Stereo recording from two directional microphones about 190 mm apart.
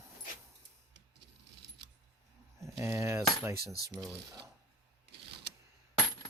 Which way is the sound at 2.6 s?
15° right (ahead or behind).